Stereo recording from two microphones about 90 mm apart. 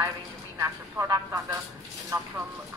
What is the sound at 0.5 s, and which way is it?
Speech, 35° right (ahead or behind).